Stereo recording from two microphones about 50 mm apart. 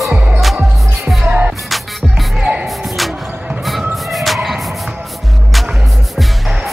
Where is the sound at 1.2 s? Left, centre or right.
Right.